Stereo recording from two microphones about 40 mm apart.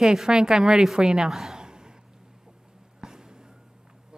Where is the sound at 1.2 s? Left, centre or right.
Centre.